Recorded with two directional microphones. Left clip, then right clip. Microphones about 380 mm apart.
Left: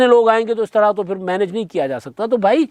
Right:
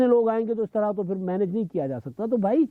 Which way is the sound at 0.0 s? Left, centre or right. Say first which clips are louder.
Left 9 dB; centre.